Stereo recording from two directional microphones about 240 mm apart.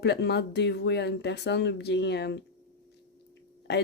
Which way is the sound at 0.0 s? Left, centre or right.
Left.